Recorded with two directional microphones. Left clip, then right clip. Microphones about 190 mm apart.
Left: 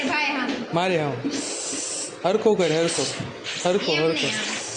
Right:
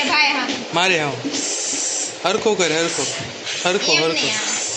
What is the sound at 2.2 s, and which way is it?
Speech, 35° left (ahead or behind).